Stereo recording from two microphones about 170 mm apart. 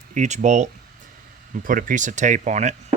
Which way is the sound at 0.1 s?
45° right (ahead or behind).